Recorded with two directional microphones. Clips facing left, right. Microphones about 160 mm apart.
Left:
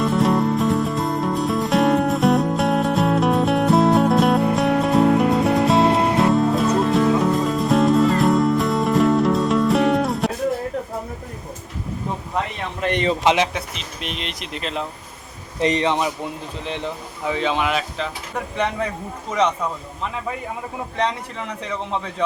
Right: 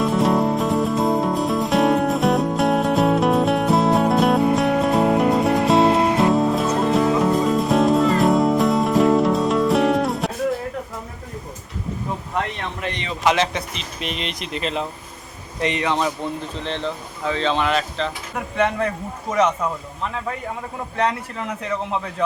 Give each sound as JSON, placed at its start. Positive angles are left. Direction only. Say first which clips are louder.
{"t": 0.0, "sound": "music", "louder": "even", "side_deg": 0}
{"t": 13.3, "sound": "speech", "louder": "even", "side_deg": 10}
{"t": 15.6, "sound": "speech", "louder": "left 4 dB", "side_deg": 35}
{"t": 15.9, "sound": "speech", "louder": "even", "side_deg": 15}
{"t": 20.9, "sound": "speech", "louder": "right 2 dB", "side_deg": 0}